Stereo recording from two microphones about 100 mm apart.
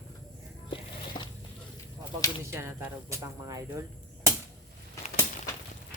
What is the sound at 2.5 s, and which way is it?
Speech, 25° right (ahead or behind).